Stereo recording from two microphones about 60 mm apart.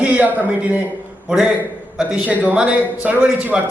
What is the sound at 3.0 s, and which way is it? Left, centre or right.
Speech, right.